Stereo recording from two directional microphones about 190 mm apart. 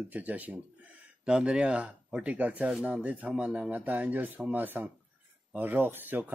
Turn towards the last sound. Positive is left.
turn(degrees=-10)  # may be behind; listen again after turning